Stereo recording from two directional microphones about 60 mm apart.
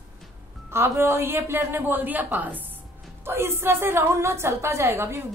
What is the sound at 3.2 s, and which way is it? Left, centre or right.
A woman's voice, right.